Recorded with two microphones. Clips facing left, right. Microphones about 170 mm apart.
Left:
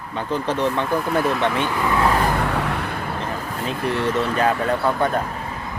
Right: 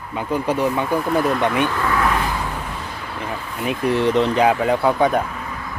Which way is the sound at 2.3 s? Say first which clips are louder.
Left 5 dB; 65° left (ahead or behind).